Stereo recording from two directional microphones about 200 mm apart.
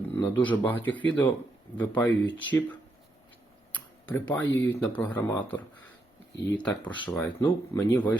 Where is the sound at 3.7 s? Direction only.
10° left (ahead or behind).